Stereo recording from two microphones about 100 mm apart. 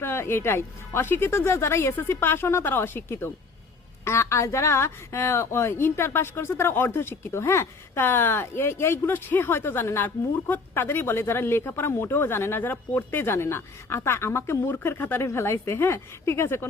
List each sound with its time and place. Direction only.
0.0 s speech: 25° left (ahead or behind)